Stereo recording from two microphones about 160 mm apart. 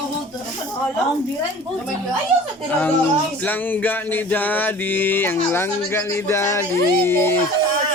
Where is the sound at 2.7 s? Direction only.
10° left (ahead or behind).